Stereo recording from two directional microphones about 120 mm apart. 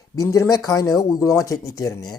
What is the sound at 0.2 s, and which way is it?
Speech, 30° left (ahead or behind).